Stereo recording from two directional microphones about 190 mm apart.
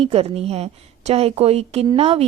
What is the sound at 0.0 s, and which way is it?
A woman's voice, 30° right (ahead or behind).